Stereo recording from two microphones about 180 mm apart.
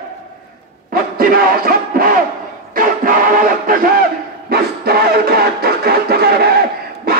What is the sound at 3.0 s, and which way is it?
Music, 50° right (ahead or behind).